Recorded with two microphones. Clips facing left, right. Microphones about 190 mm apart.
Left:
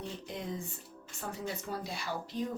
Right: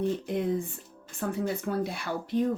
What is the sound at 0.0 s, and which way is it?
Speech, 55° right (ahead or behind).